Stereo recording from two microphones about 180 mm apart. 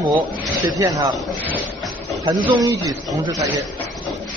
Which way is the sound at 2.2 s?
25° right (ahead or behind).